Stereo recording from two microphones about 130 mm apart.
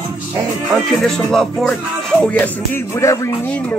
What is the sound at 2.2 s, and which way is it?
Music, 10° left (ahead or behind).